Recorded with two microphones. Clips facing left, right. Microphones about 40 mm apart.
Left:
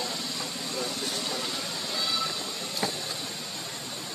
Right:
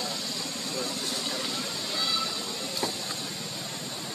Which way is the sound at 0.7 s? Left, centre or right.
Centre.